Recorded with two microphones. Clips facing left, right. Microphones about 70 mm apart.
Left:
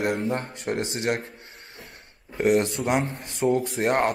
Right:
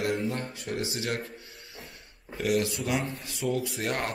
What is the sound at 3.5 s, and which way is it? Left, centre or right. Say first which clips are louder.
Speech: left 7 dB; left.